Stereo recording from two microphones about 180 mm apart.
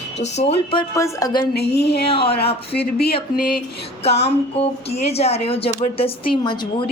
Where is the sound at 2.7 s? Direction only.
60° left (ahead or behind).